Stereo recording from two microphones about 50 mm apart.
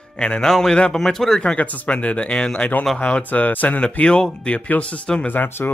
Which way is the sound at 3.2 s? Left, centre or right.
Left.